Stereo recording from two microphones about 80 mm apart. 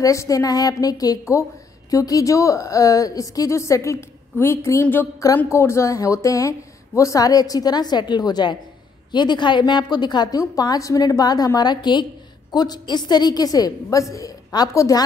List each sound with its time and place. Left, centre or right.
0.0 s a woman's voice: left
12.5 s a woman's voice: left